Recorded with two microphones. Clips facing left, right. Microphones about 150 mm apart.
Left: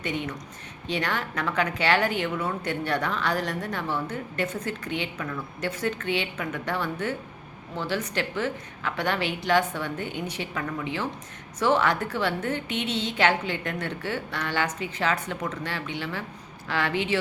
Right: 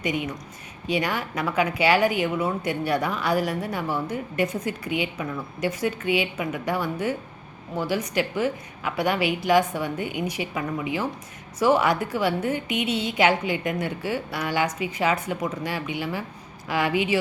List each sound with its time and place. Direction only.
0.0 s a woman's voice: 10° right (ahead or behind)